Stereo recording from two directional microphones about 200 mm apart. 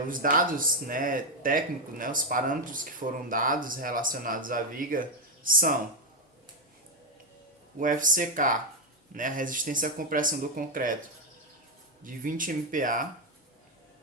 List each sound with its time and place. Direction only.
0.1 s speech: 45° right (ahead or behind)
7.8 s speech: 40° right (ahead or behind)
12.0 s speech: 45° right (ahead or behind)